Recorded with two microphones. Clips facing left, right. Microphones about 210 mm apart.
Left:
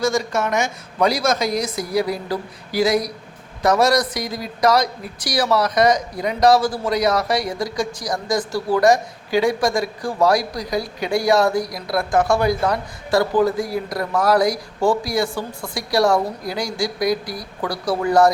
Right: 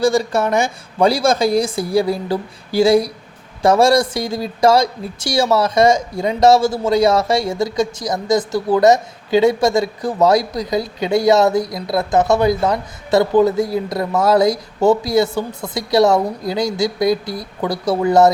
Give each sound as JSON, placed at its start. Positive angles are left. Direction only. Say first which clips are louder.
{"t": 0.0, "sound": "speech", "louder": "right 5 dB", "side_deg": -30}